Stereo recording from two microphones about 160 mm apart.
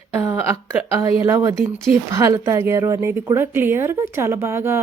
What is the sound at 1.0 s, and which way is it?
Speech, 20° right (ahead or behind).